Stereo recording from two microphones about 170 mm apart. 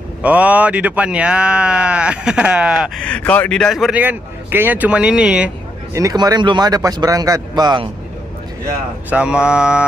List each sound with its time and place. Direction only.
0.2 s speech: 10° right (ahead or behind)
3.1 s a man's voice: 10° left (ahead or behind)
5.9 s speech: 20° right (ahead or behind)
9.1 s a man's voice: 5° right (ahead or behind)